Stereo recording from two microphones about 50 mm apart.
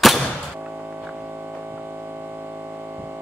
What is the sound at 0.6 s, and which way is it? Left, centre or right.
Music, right.